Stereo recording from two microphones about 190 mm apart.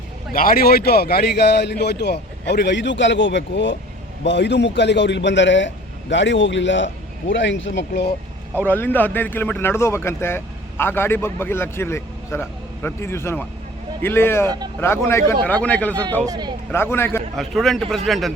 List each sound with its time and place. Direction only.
0.3 s a man's voice: 50° left (ahead or behind); by 8.0 s 70° left (ahead or behind)
8.5 s a man's voice: 10° left (ahead or behind)
16.2 s speech: 20° right (ahead or behind)
16.7 s a man's voice: 10° left (ahead or behind)
17.3 s a man's voice: centre (ahead or behind)